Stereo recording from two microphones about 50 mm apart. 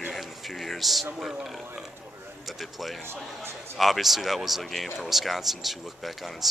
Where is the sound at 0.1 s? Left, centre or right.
Centre.